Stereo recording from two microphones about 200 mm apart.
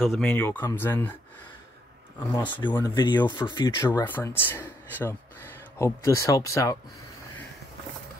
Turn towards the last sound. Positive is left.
turn(degrees=15)  # may be behind; listen again after turning